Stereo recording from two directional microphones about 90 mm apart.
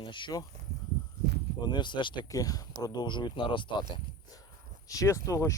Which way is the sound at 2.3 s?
45° left (ahead or behind).